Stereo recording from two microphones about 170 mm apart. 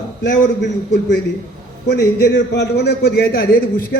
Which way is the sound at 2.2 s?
75° left (ahead or behind).